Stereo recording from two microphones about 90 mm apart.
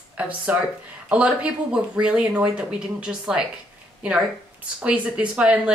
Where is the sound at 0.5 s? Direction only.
20° right (ahead or behind).